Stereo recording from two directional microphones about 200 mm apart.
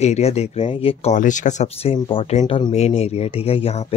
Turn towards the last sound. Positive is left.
turn(degrees=30)  # may be behind; listen again after turning